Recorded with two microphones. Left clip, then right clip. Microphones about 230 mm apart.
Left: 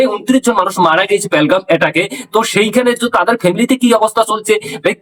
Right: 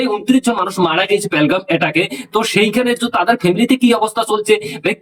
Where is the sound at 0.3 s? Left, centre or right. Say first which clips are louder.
Left 3 dB; centre.